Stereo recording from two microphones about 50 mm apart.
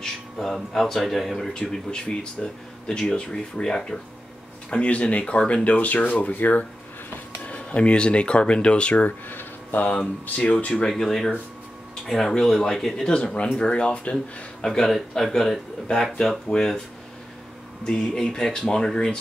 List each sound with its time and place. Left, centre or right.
0.0 s speech: centre
1.5 s speech: centre
9.3 s a sound: left
10.4 s speech: left
10.9 s speech: centre
13.1 s speech: left
14.1 s speech: centre
17.9 s speech: centre